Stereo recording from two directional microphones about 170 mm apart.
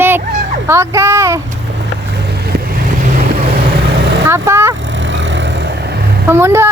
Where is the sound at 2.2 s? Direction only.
70° right (ahead or behind).